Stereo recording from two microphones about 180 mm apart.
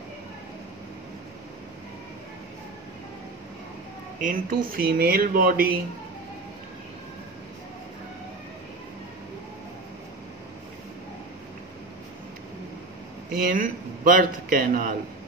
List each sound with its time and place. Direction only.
4.2 s speech: 50° right (ahead or behind)
13.3 s a man's voice: 50° right (ahead or behind)